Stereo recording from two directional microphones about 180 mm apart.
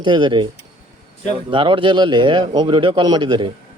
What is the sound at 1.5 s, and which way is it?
A man's voice, 30° right (ahead or behind).